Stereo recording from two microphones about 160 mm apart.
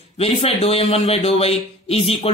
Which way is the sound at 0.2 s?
40° left (ahead or behind).